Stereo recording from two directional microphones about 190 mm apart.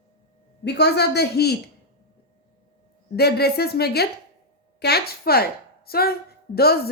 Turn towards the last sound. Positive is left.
turn(degrees=55)  # may be behind; listen again after turning